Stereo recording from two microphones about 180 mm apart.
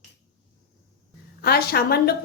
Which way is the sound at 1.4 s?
60° left (ahead or behind).